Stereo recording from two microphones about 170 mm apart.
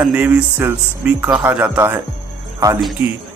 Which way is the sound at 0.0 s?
10° right (ahead or behind).